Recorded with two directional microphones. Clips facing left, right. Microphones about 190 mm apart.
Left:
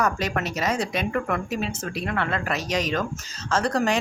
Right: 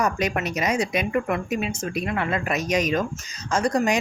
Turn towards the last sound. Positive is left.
turn(degrees=-15)  # may be behind; listen again after turning